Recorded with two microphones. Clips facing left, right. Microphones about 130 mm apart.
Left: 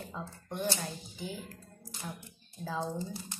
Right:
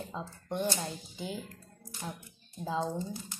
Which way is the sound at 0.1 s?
20° right (ahead or behind).